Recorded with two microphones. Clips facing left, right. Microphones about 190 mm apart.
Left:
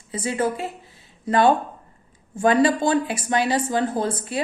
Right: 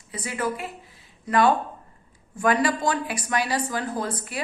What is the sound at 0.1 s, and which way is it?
A woman's voice, 25° left (ahead or behind).